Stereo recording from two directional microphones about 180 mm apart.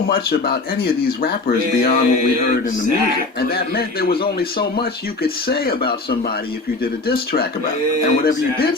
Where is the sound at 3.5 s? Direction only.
60° left (ahead or behind).